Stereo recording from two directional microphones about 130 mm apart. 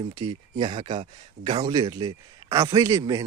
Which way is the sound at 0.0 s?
30° right (ahead or behind).